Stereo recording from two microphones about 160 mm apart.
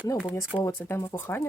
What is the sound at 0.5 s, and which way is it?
Speech, 15° left (ahead or behind).